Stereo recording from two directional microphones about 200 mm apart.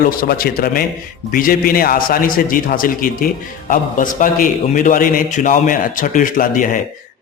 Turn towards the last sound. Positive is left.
turn(degrees=40)  # may be behind; listen again after turning